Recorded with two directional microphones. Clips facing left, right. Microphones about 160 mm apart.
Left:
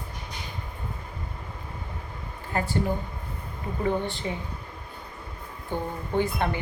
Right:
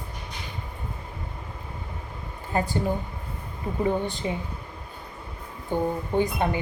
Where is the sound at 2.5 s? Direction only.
15° right (ahead or behind).